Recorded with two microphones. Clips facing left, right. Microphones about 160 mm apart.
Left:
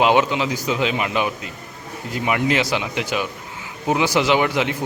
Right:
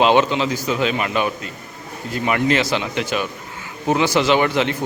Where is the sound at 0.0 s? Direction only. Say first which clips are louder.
Right 1 dB; 10° left (ahead or behind).